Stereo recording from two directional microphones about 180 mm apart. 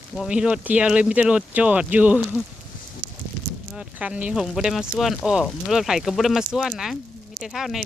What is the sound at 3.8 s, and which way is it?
Speech, 5° right (ahead or behind).